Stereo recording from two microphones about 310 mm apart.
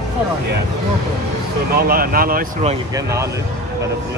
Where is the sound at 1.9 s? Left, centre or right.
Right.